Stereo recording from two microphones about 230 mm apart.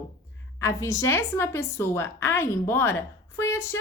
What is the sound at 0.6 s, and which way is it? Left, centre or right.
A woman's voice, centre.